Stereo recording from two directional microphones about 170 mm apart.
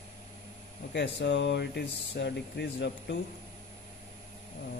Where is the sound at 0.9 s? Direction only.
90° left.